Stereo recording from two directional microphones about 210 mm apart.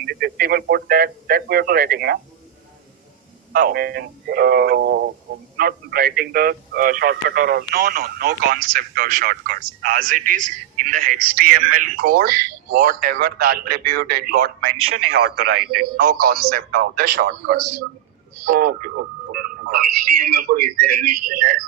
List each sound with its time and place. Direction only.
0.0 s speech: 45° right (ahead or behind)
3.5 s a man's voice: 45° right (ahead or behind)
15.4 s a man's voice: 90° right
16.0 s a man's voice: 45° right (ahead or behind)